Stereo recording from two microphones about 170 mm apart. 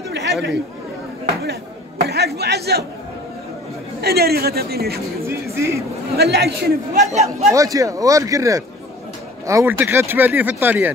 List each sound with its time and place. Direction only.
0.1 s chatter: 85° right
1.4 s chatter: 70° right (ahead or behind)
4.0 s a man's voice: 70° right (ahead or behind)
5.2 s speech: 15° right (ahead or behind)
6.1 s a man's voice: 70° right (ahead or behind)
7.5 s speech: 20° right (ahead or behind)